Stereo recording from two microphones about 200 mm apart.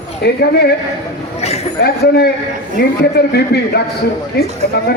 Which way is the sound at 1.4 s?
30° left (ahead or behind).